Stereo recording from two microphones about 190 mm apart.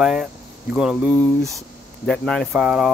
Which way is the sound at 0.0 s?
5° right (ahead or behind).